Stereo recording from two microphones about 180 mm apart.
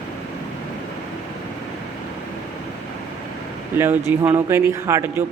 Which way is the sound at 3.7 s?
10° right (ahead or behind).